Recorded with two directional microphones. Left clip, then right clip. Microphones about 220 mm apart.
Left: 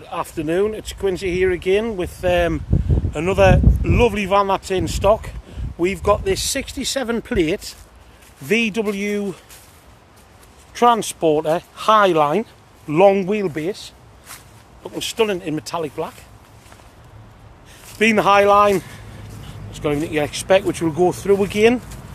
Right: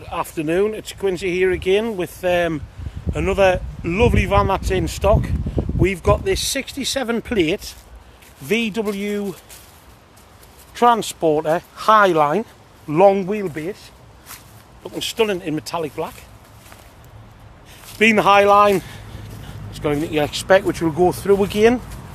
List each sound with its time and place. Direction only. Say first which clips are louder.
0.0 s speech: right 1 dB; centre (ahead or behind)
2.3 s speech: left 2 dB; 10° left (ahead or behind)
10.7 s speech: even; 5° left (ahead or behind)
14.3 s speech: even; 5° left (ahead or behind)
17.9 s speech: right 1 dB; centre (ahead or behind)